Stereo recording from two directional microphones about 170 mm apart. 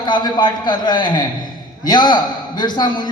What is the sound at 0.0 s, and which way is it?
A man's voice, 25° left (ahead or behind).